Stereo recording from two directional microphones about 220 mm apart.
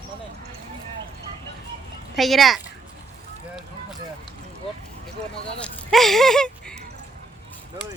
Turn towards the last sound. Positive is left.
turn(degrees=5)  # may be behind; listen again after turning